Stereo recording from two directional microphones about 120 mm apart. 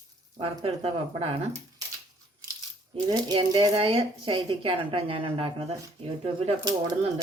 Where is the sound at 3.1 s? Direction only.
35° right (ahead or behind).